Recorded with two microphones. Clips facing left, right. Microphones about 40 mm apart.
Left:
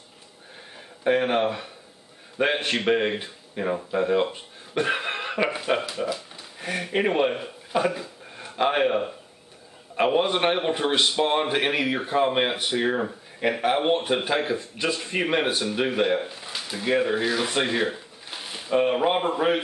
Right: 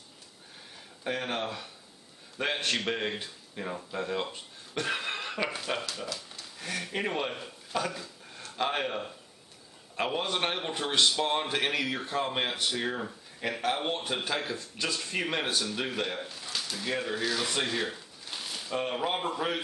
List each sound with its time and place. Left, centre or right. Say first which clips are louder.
0.7 s a man's voice: left 11 dB; left